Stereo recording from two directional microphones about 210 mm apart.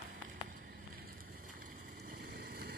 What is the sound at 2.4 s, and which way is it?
Vehicle, 50° right (ahead or behind).